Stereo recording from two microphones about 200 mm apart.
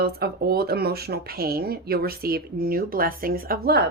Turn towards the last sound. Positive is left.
turn(degrees=-50)  # may be behind; listen again after turning